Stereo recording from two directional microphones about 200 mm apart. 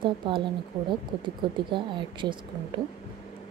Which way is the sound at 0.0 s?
25° right (ahead or behind).